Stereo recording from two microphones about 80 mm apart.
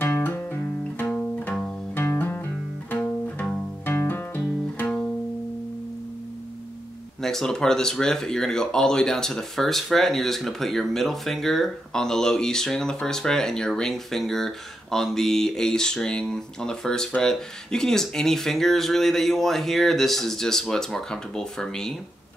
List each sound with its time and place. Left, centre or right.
0.0 s music: left
2.1 s music: left
3.8 s music: left
4.7 s music: centre
7.2 s speech: centre